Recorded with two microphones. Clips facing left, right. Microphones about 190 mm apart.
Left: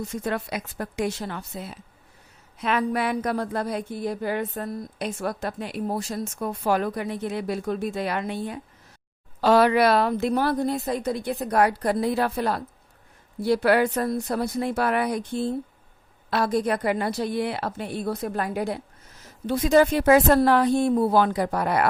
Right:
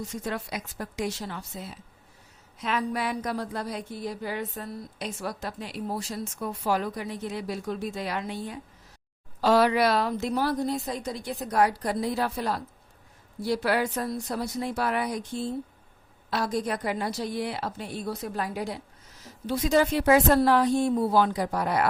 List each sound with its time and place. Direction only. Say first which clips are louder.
0.1 s speech: left 4 dB; 60° left (ahead or behind)